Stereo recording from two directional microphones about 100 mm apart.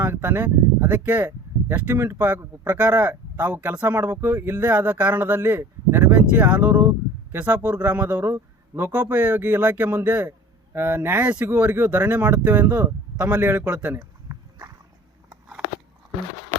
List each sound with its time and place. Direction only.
0.0 s speech: 20° right (ahead or behind)